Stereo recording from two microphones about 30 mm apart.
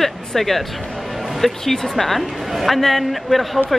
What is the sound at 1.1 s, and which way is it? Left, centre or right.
Music, centre.